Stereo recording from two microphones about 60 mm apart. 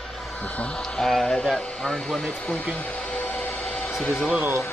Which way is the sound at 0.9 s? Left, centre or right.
Centre.